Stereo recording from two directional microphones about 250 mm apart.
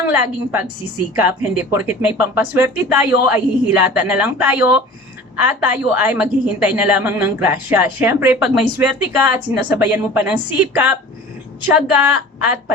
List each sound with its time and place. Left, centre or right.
0.0 s a woman's voice: centre